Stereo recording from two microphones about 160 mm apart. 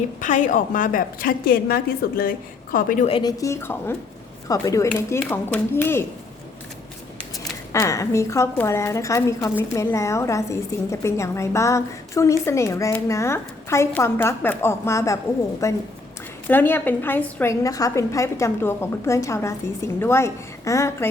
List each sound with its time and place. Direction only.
0.2 s a woman's voice: 50° left (ahead or behind)
3.1 s a woman's voice: 30° left (ahead or behind)
7.7 s a woman's voice: 20° left (ahead or behind)